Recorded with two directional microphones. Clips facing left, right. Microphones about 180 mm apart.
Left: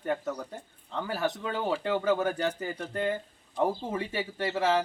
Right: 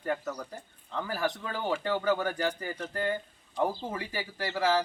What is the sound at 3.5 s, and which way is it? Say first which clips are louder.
Speech: left 2 dB; 5° left (ahead or behind).